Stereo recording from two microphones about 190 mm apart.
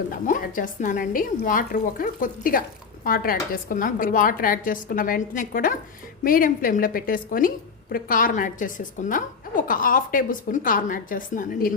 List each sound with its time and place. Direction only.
0.1 s speech: 45° left (ahead or behind)